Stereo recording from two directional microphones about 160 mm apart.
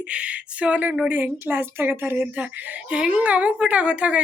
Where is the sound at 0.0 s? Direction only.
5° right (ahead or behind).